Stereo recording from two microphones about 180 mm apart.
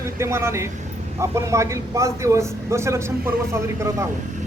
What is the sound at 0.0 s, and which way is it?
A man's voice, 15° right (ahead or behind).